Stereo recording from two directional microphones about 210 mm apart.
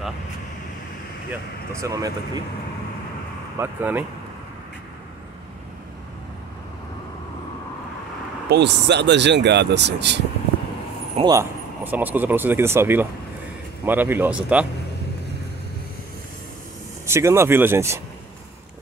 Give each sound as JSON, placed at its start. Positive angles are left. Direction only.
{"t": 1.3, "sound": "speech", "side_deg": -15}
{"t": 3.5, "sound": "speech", "side_deg": -10}
{"t": 8.5, "sound": "speech", "side_deg": -55}
{"t": 11.1, "sound": "speech", "side_deg": -15}
{"t": 17.0, "sound": "speech", "side_deg": -15}